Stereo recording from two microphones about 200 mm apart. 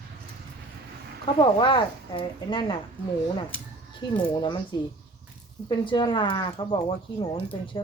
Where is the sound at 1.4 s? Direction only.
25° left (ahead or behind).